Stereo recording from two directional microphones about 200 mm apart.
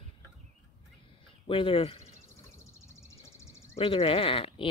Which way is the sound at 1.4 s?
25° left (ahead or behind).